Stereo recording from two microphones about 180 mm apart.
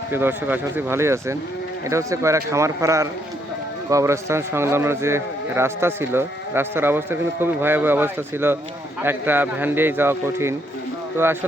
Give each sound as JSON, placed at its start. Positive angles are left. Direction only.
{"t": 0.1, "sound": "speech", "side_deg": -10}